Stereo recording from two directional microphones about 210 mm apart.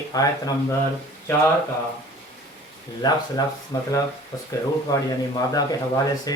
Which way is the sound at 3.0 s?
20° left (ahead or behind).